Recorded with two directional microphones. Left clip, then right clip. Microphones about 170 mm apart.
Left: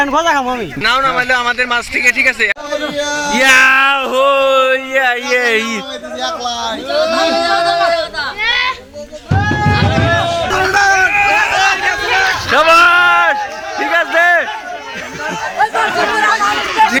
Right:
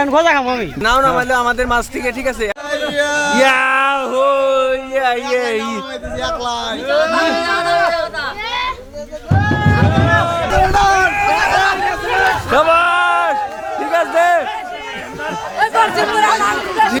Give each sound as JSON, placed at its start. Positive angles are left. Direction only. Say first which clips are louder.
{"t": 0.1, "sound": "speech", "louder": "even", "side_deg": -15}
{"t": 1.4, "sound": "speech", "louder": "left 1 dB", "side_deg": -15}
{"t": 2.9, "sound": "speech", "louder": "right 5 dB", "side_deg": -35}
{"t": 3.3, "sound": "speech", "louder": "left 6 dB", "side_deg": 10}
{"t": 6.8, "sound": "speech", "louder": "right 1 dB", "side_deg": -15}
{"t": 7.3, "sound": "a sound", "louder": "left 2 dB", "side_deg": -30}
{"t": 8.4, "sound": "children playing", "louder": "left 9 dB", "side_deg": -70}
{"t": 9.3, "sound": "music", "louder": "left 2 dB", "side_deg": -50}
{"t": 10.2, "sound": "a sound", "louder": "even", "side_deg": -25}
{"t": 10.9, "sound": "a sound", "louder": "left 3 dB", "side_deg": -65}
{"t": 12.5, "sound": "a sound", "louder": "left 6 dB", "side_deg": 10}
{"t": 15.7, "sound": "chatter", "louder": "even", "side_deg": -15}
{"t": 16.1, "sound": "chatter", "louder": "left 1 dB", "side_deg": -30}